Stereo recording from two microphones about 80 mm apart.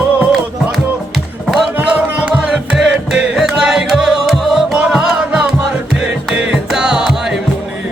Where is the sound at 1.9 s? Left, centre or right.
Centre.